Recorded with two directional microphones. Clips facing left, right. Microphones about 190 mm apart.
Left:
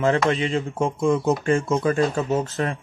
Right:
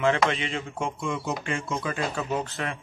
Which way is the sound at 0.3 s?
35° left (ahead or behind).